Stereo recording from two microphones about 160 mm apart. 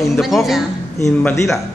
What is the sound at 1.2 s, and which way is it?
Speech, 10° left (ahead or behind).